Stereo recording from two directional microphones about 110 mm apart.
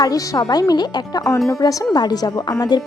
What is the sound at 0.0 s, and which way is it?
Speech, 35° left (ahead or behind).